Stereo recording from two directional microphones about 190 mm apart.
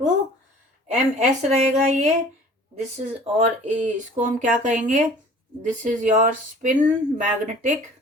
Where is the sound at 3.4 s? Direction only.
35° right (ahead or behind).